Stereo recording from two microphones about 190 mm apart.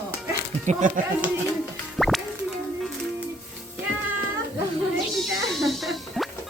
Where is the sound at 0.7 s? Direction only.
40° right (ahead or behind).